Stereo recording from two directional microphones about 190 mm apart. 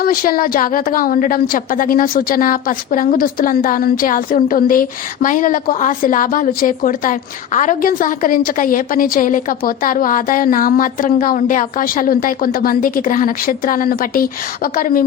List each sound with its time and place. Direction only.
0.0 s a woman's voice: 50° left (ahead or behind)